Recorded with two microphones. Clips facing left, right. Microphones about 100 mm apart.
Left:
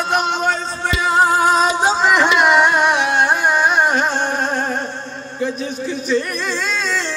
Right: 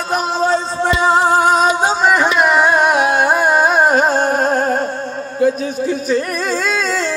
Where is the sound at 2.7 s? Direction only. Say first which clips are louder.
Right 3 dB; 40° right (ahead or behind).